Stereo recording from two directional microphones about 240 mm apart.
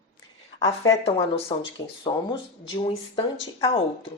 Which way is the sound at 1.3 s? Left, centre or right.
Left.